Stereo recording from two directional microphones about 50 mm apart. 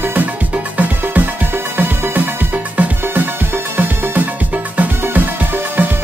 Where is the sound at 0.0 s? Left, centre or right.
Right.